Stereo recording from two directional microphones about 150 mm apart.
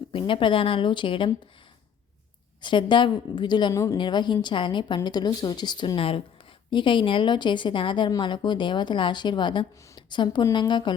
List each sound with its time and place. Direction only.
0.1 s a woman's voice: 35° left (ahead or behind)
2.6 s a woman's voice: 30° left (ahead or behind)